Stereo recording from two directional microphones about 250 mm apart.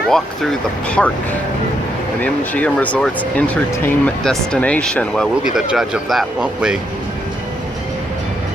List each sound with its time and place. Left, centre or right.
0.1 s speech: centre
2.2 s speech: centre